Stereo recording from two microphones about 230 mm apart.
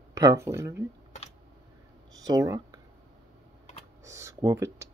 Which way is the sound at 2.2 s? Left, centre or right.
Centre.